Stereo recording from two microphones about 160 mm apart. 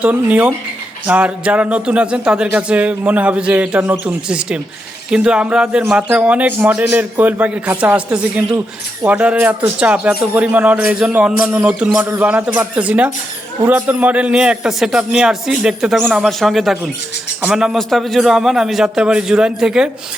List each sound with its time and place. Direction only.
0.0 s a man's voice: 10° right (ahead or behind)